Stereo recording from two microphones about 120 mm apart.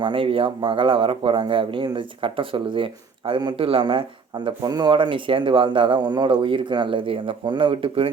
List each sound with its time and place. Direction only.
0.0 s a man's voice: 45° right (ahead or behind)